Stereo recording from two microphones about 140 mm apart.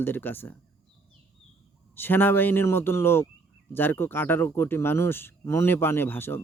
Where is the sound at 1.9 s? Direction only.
15° left (ahead or behind).